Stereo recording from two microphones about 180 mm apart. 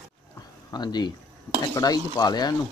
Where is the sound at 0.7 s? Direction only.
25° left (ahead or behind).